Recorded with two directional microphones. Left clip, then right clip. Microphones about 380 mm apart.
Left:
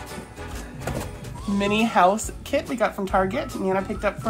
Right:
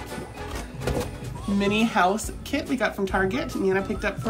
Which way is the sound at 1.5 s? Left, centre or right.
Centre.